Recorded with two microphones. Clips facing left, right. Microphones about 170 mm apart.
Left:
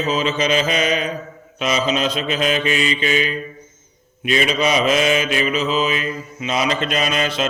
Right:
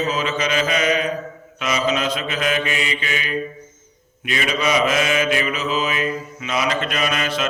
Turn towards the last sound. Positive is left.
turn(degrees=25)  # may be behind; listen again after turning